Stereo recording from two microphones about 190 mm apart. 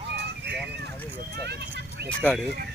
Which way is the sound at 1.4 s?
60° right (ahead or behind).